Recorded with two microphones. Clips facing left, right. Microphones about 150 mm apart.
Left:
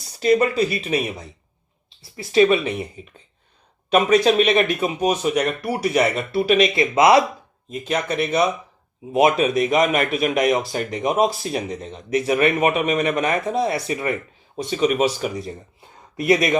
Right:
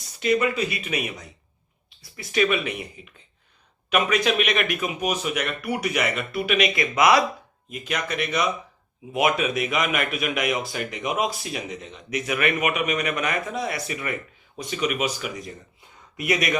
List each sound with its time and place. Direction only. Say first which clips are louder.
0.2 s speech: left 5 dB; 40° left (ahead or behind)